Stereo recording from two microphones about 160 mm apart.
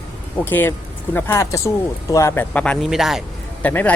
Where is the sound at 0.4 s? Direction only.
10° left (ahead or behind).